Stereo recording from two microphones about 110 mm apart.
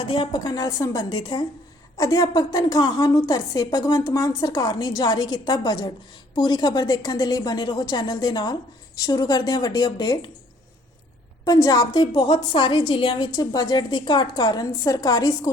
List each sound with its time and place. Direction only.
0.0 s a woman's voice: 45° left (ahead or behind)
1.2 s a woman's voice: 45° left (ahead or behind)
2.0 s a woman's voice: 35° left (ahead or behind)
11.4 s a woman's voice: 35° left (ahead or behind)